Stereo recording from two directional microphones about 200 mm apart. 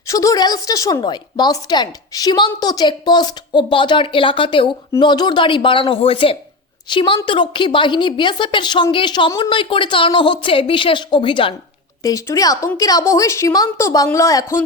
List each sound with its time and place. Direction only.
0.1 s a woman's voice: 15° left (ahead or behind)